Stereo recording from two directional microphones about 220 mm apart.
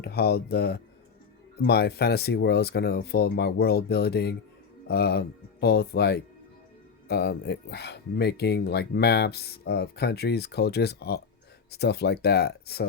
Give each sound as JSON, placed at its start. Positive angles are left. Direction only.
{"t": 0.0, "sound": "speech", "side_deg": 45}